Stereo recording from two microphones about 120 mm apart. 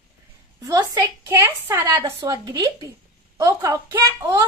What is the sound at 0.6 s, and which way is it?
A woman's voice, 30° right (ahead or behind).